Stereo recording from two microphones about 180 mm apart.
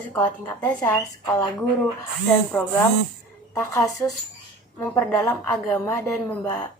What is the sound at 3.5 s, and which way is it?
Speech, 20° left (ahead or behind).